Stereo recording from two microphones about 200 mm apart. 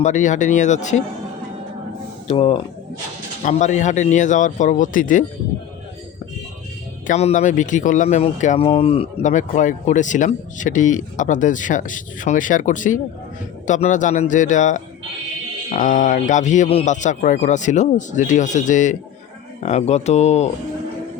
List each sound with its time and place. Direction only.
0.0 s speech: 35° left (ahead or behind)
2.2 s speech: 30° left (ahead or behind)
7.1 s speech: 35° left (ahead or behind)